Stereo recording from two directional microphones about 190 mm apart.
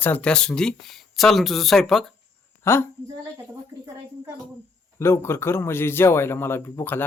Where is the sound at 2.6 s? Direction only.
15° left (ahead or behind).